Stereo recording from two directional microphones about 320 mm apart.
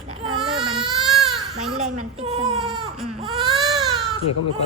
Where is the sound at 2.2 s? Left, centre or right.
Centre.